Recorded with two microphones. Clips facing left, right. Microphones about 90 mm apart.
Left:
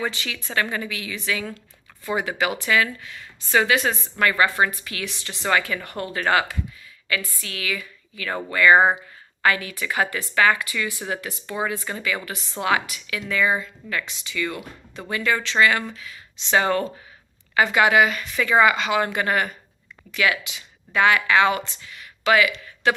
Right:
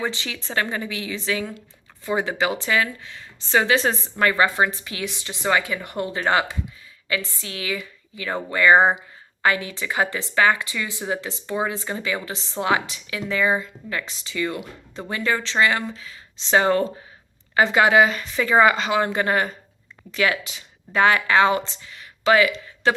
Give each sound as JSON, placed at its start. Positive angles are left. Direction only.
{"t": 0.0, "sound": "speech", "side_deg": -25}